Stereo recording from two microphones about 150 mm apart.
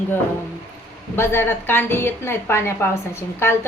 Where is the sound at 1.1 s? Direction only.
15° left (ahead or behind).